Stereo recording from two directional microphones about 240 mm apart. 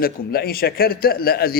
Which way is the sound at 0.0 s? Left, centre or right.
Left.